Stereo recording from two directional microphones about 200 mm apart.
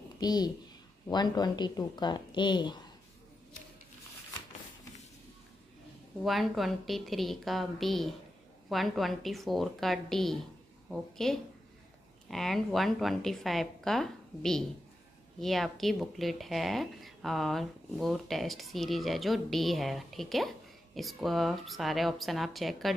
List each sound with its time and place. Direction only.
0.2 s a woman's voice: 20° left (ahead or behind)
6.2 s a woman's voice: centre (ahead or behind)